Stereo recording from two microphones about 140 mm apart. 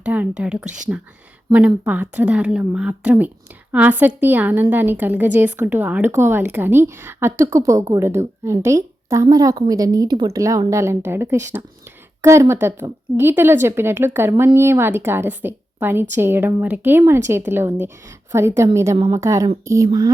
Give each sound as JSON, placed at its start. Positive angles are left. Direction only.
{"t": 0.0, "sound": "a woman's voice", "side_deg": -10}